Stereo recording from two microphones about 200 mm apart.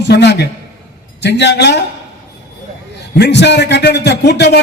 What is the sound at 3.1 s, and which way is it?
A man's voice, 60° left (ahead or behind).